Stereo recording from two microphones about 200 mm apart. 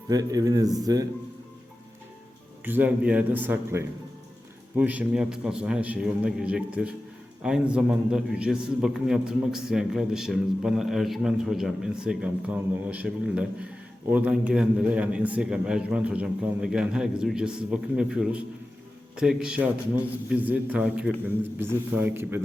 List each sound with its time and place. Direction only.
0.1 s a man's voice: 20° right (ahead or behind)
2.6 s a man's voice: 10° right (ahead or behind)